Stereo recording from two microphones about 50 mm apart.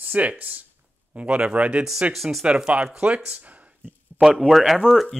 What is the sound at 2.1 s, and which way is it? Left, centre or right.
Speech, centre.